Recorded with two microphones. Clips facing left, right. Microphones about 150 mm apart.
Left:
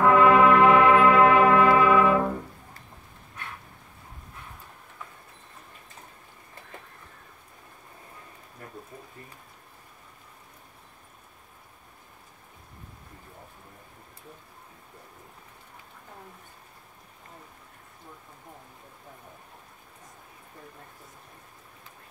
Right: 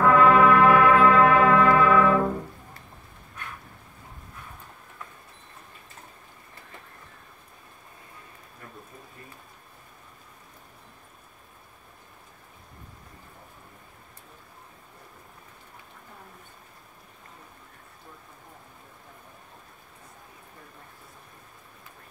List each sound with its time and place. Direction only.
0.0 s brass instrument: 20° left (ahead or behind)